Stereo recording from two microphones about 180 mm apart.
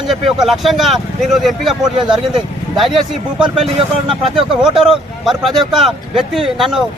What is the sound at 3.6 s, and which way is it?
Speech, 30° right (ahead or behind).